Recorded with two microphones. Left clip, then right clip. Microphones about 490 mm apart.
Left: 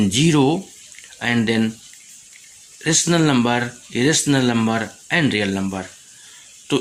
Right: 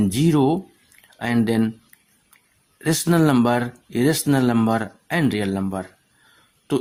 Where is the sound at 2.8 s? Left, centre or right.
Right.